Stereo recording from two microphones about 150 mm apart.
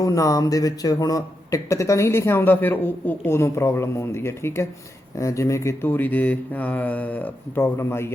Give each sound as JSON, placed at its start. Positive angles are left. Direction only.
{"t": 0.0, "sound": "speech", "side_deg": 20}